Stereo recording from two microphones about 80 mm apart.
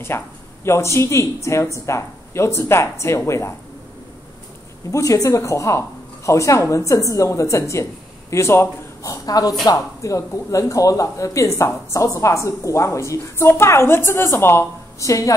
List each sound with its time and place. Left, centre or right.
0.1 s speech: left
4.9 s a man's voice: left
9.1 s a woman's voice: left